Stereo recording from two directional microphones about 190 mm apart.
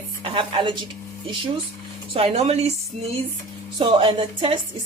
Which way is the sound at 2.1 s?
30° right (ahead or behind).